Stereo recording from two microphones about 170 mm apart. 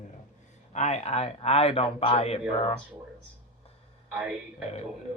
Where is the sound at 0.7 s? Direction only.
40° left (ahead or behind).